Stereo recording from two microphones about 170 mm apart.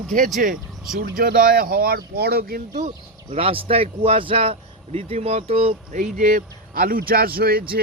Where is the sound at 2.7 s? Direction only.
45° right (ahead or behind).